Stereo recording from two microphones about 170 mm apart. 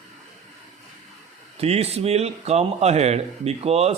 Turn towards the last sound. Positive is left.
turn(degrees=-35)  # may be behind; listen again after turning